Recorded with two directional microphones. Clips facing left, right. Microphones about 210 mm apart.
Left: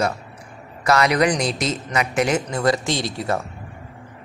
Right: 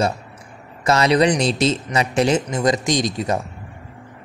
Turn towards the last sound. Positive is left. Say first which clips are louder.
# right 3 dB
turn(degrees=-20)  # may be behind; listen again after turning